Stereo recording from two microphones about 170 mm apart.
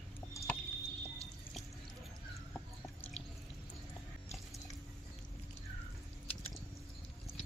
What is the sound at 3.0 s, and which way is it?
Drip, 40° left (ahead or behind).